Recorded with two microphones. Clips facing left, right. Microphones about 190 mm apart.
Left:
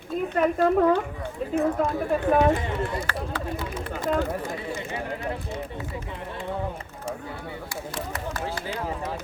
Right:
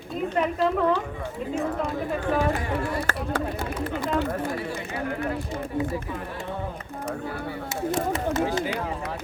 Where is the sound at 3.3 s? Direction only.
45° right (ahead or behind).